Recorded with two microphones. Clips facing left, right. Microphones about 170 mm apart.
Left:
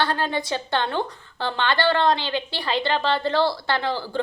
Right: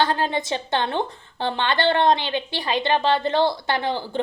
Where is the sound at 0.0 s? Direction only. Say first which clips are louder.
Right 2 dB; 20° right (ahead or behind).